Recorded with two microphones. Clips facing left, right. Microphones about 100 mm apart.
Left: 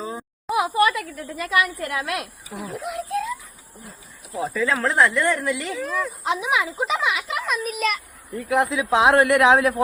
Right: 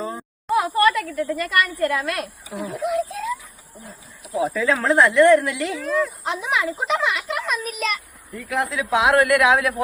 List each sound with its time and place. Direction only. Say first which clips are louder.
0.0 s a sound: right 1 dB; 5° left (ahead or behind)
1.4 s a woman's voice: left 1 dB; 5° left (ahead or behind)
4.5 s a woman's voice: right 1 dB; centre (ahead or behind)
8.4 s speech: left 3 dB; 20° left (ahead or behind)